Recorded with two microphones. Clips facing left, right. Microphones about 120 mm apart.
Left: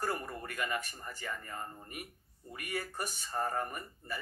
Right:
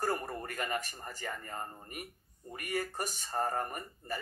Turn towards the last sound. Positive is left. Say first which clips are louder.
# right 2 dB
turn(degrees=-45)  # may be behind; listen again after turning